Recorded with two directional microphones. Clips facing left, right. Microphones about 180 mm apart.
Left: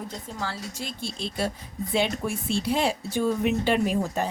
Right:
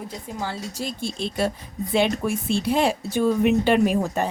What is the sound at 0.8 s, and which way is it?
Speech, 50° right (ahead or behind).